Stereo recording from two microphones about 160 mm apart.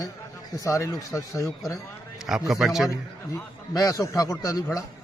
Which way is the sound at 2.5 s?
Centre (ahead or behind).